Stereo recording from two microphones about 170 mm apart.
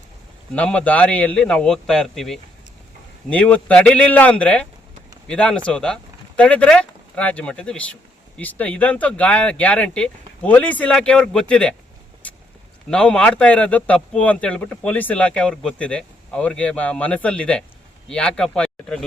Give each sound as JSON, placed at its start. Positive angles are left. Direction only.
{"t": 0.5, "sound": "speech", "side_deg": 5}
{"t": 12.2, "sound": "vehicle", "side_deg": 10}
{"t": 12.9, "sound": "speech", "side_deg": 5}